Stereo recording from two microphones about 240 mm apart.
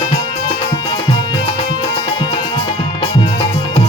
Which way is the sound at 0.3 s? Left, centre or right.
Centre.